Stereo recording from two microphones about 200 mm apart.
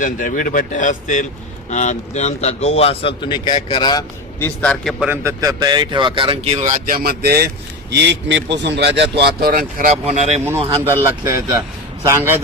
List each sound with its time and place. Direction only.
0.0 s speech: 45° left (ahead or behind); by 4.0 s 20° left (ahead or behind)
4.4 s speech: 10° left (ahead or behind); by 10.4 s 35° right (ahead or behind)
11.0 s speech: 15° right (ahead or behind)